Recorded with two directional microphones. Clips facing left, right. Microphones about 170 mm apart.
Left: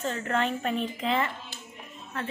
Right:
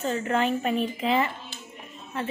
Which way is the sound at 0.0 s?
10° right (ahead or behind).